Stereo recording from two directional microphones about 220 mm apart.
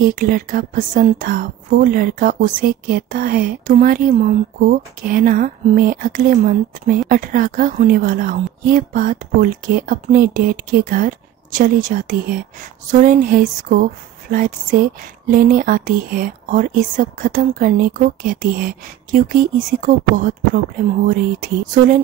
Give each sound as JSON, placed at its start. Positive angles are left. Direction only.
{"t": 0.0, "sound": "speech", "side_deg": -40}